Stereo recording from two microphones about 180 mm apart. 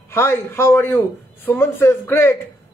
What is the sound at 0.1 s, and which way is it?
A man's voice, 15° left (ahead or behind).